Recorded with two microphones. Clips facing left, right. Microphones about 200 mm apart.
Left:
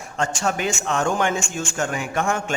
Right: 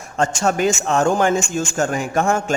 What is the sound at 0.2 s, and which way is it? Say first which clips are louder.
A man's voice: right 5 dB; 40° right (ahead or behind).